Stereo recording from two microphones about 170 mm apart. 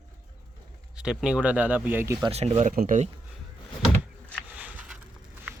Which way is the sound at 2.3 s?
40° right (ahead or behind).